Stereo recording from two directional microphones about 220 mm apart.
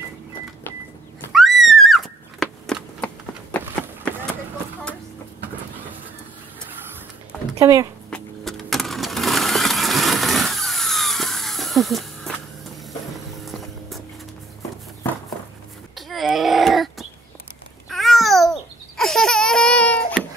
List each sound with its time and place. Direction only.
1.3 s a sound: centre (ahead or behind)
7.5 s speech: 15° right (ahead or behind)
8.1 s a sound: centre (ahead or behind)
13.5 s vehicle: centre (ahead or behind)
16.1 s baby cry: centre (ahead or behind)
17.8 s babbling: centre (ahead or behind)